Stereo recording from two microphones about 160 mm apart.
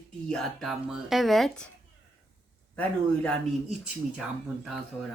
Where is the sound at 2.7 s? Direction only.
10° left (ahead or behind).